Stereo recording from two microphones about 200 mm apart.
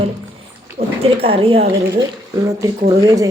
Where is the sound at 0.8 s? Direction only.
30° right (ahead or behind).